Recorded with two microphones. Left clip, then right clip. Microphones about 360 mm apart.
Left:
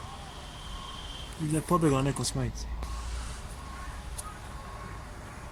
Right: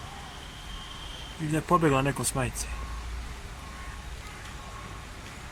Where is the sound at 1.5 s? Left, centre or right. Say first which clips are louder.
Right 3 dB; centre.